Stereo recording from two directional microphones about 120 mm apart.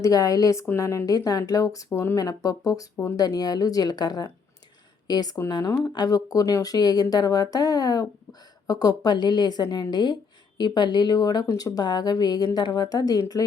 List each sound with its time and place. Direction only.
0.0 s speech: 30° left (ahead or behind)